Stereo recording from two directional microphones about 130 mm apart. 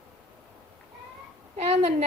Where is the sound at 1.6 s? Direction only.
50° right (ahead or behind).